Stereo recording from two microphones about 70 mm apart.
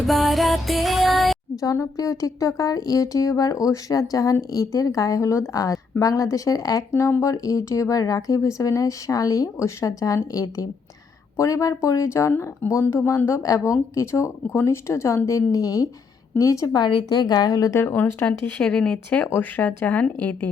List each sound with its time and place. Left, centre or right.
0.0 s music: centre
1.6 s a woman's voice: left
5.5 s a woman's voice: left
6.9 s a woman's voice: left
16.7 s a woman's voice: left
17.7 s speech: left
18.6 s speech: centre